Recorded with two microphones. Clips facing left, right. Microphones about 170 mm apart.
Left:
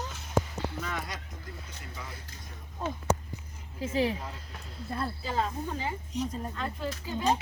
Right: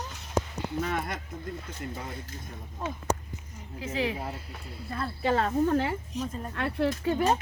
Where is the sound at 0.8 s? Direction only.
55° right (ahead or behind).